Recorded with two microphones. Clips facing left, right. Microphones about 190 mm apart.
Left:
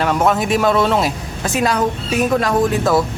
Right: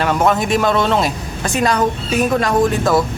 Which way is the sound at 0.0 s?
Centre (ahead or behind).